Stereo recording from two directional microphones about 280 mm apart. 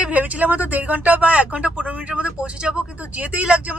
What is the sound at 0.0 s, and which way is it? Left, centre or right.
Speech, centre.